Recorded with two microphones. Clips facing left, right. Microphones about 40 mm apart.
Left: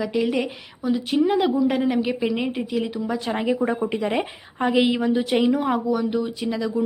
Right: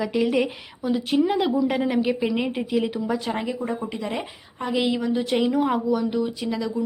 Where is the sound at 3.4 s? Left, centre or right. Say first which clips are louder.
Left 6 dB; left; by 6.7 s centre.